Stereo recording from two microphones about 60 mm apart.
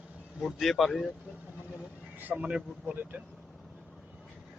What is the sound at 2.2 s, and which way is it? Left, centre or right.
Speech, right.